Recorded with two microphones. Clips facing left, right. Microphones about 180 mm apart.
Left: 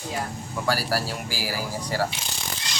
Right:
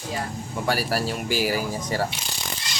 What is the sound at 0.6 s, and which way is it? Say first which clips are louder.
Speech: right 1 dB; 20° right (ahead or behind).